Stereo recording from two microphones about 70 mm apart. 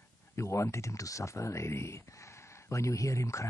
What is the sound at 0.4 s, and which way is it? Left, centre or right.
Speech, left.